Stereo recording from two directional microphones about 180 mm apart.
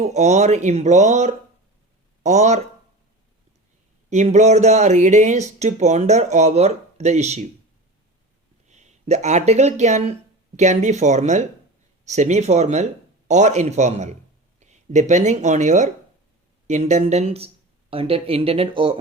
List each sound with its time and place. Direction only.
0.0 s speech: 40° right (ahead or behind)
4.1 s speech: 40° right (ahead or behind)
8.6 s speech: 40° right (ahead or behind)